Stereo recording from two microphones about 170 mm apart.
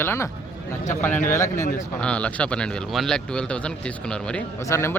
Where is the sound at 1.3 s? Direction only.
15° left (ahead or behind).